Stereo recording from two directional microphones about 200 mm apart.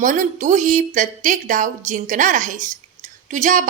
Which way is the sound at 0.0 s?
40° right (ahead or behind).